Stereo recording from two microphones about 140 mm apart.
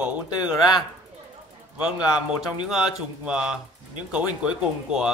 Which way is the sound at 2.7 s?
5° right (ahead or behind).